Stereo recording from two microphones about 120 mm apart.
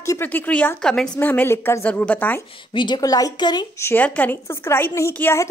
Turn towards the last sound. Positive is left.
turn(degrees=20)  # may be behind; listen again after turning